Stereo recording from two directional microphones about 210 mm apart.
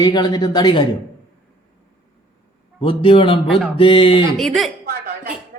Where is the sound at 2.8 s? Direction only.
25° left (ahead or behind).